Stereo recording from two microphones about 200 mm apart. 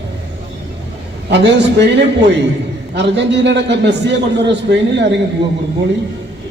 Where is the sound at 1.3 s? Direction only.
60° right (ahead or behind).